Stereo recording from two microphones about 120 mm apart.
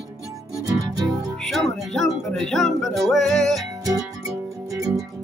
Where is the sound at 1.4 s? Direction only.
Centre (ahead or behind).